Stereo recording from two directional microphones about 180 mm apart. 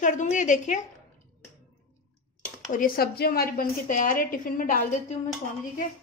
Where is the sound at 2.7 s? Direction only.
55° left (ahead or behind).